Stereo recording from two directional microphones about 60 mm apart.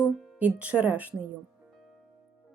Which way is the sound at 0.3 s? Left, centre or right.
Right.